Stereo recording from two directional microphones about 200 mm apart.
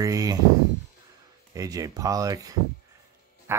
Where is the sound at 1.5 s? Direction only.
15° right (ahead or behind).